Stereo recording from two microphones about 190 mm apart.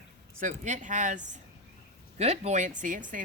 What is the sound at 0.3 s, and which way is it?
A woman's voice, 40° right (ahead or behind).